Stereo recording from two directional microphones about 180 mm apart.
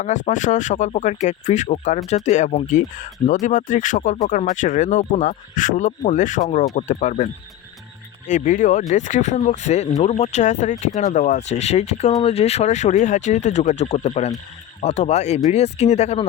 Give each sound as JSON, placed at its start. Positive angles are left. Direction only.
{"t": 0.0, "sound": "speech", "side_deg": 40}
{"t": 8.3, "sound": "speech", "side_deg": 45}